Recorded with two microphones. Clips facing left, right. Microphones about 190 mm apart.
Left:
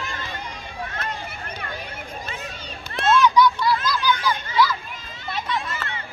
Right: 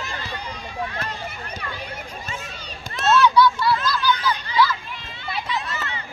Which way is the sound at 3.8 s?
50° left (ahead or behind).